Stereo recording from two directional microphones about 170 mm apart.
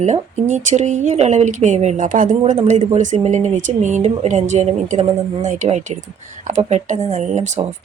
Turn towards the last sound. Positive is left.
turn(degrees=-45)  # may be behind; listen again after turning